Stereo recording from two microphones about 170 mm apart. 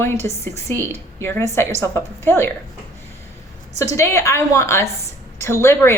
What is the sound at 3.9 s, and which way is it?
A woman's voice, 15° left (ahead or behind).